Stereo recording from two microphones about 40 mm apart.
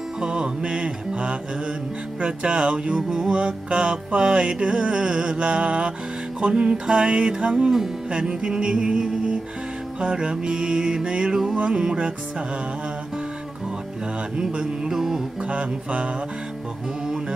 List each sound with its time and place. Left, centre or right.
0.2 s music: right
3.0 s mantra: centre
3.3 s music: right
14.3 s mantra: right
15.4 s mantra: right